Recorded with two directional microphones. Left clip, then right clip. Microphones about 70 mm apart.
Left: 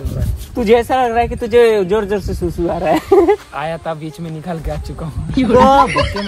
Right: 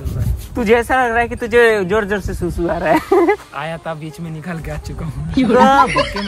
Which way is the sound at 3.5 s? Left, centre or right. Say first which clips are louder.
Left 3 dB; left.